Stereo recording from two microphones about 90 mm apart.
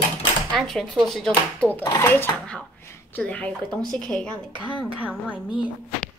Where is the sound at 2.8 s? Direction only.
30° left (ahead or behind).